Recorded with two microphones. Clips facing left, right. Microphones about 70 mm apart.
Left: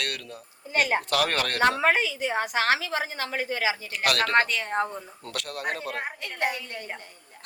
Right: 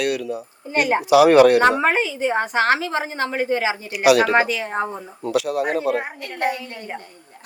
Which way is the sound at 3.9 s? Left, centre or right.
Centre.